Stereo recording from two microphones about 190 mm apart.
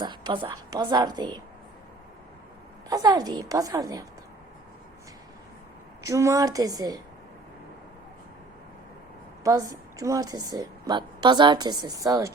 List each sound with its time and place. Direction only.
0.0 s a woman's voice: 25° right (ahead or behind)
2.9 s a woman's voice: 20° right (ahead or behind)
6.1 s a woman's voice: 15° right (ahead or behind)
9.4 s a woman's voice: 20° right (ahead or behind)